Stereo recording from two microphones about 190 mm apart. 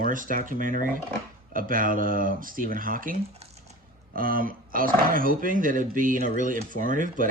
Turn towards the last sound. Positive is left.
turn(degrees=-45)  # may be behind; listen again after turning